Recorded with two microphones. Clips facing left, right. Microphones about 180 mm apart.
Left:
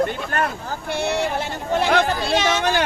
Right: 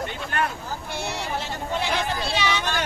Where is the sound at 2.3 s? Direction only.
50° left (ahead or behind).